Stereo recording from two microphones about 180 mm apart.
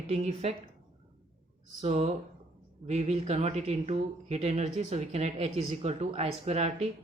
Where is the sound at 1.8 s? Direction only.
35° right (ahead or behind).